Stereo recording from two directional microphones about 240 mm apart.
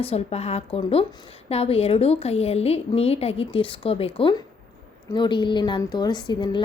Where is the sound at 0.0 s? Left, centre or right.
Left.